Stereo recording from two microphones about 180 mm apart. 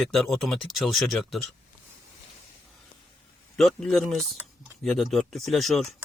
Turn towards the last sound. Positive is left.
turn(degrees=0)  # may be behind; listen again after turning